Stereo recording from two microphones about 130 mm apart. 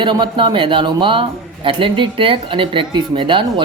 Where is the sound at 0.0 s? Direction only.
35° right (ahead or behind).